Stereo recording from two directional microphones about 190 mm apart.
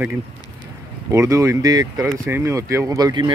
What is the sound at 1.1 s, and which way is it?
Speech, 15° right (ahead or behind).